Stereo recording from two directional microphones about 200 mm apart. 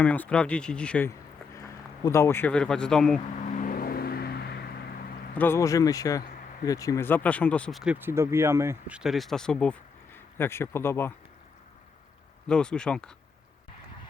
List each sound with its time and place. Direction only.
0.0 s speech: 5° left (ahead or behind)
3.5 s vehicle: 45° left (ahead or behind)
5.4 s speech: 15° left (ahead or behind)
12.5 s speech: 5° left (ahead or behind)